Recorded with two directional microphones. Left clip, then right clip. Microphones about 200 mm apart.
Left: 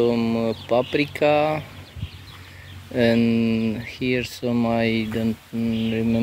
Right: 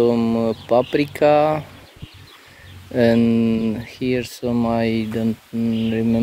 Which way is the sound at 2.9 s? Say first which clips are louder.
Right 3 dB; 30° right (ahead or behind).